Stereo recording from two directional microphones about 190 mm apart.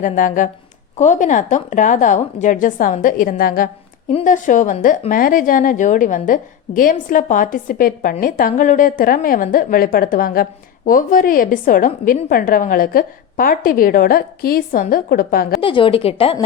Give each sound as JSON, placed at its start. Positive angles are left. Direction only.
{"t": 0.0, "sound": "a woman's voice", "side_deg": 45}
{"t": 15.6, "sound": "a woman's voice", "side_deg": 25}